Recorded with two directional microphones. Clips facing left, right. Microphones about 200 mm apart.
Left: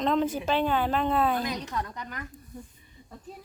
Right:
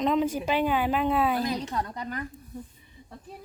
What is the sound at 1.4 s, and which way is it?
Speech, 30° right (ahead or behind).